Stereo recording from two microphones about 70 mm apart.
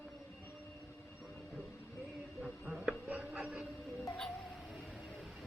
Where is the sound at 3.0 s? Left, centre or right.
Centre.